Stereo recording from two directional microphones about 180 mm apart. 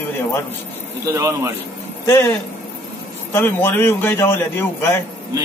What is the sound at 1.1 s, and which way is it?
Speech, 15° right (ahead or behind).